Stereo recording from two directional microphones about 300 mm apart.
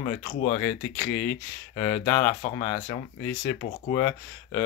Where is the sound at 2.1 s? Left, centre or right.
Left.